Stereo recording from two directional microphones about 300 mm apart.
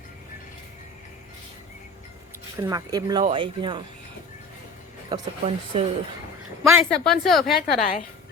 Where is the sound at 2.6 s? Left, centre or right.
Centre.